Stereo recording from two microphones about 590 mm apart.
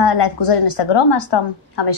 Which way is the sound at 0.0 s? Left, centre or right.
Left.